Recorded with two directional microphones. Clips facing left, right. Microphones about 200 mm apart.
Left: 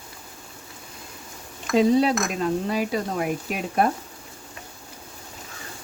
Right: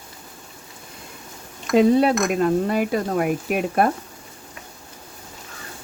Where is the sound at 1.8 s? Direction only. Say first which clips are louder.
Right 3 dB; 55° right (ahead or behind).